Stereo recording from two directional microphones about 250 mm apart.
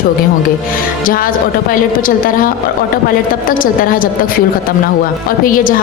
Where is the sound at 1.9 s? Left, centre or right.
Left.